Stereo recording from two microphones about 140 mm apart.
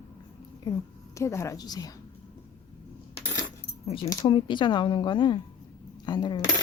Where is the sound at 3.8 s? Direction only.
50° left (ahead or behind).